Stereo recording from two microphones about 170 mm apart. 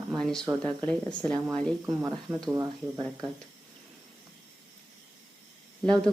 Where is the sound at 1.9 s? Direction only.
15° right (ahead or behind).